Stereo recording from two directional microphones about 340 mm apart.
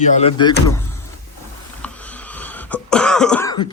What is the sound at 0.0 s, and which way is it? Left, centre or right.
Speech, centre.